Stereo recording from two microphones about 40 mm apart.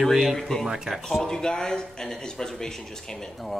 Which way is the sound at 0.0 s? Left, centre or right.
Centre.